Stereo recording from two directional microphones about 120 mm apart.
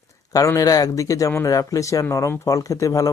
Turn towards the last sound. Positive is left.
turn(degrees=25)  # may be behind; listen again after turning